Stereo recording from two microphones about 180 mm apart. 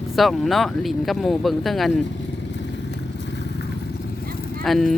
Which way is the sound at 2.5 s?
75° left (ahead or behind).